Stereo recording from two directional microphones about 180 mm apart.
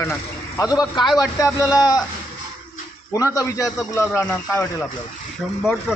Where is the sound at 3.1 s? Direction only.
20° left (ahead or behind).